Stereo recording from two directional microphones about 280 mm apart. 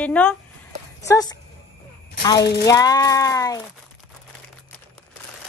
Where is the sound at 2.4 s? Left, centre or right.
Left.